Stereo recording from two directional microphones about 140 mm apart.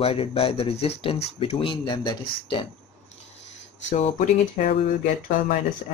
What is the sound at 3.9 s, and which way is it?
Speech, 60° left (ahead or behind).